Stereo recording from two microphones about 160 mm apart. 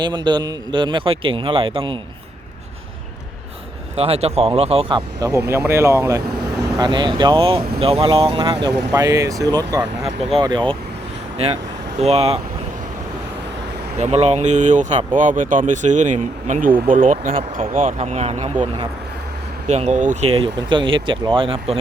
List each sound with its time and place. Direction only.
0.0 s speech: 25° right (ahead or behind)
3.9 s speech: 40° right (ahead or behind)
5.5 s speech: 15° right (ahead or behind); by 8.7 s 35° right (ahead or behind)
8.9 s speech: 20° right (ahead or behind)
10.0 s speech: 40° right (ahead or behind)
11.3 s speech: 40° right (ahead or behind)
14.0 s speech: 40° right (ahead or behind)
18.0 s speech: 40° right (ahead or behind)
19.6 s speech: 45° right (ahead or behind)
20.3 s speech: 35° right (ahead or behind)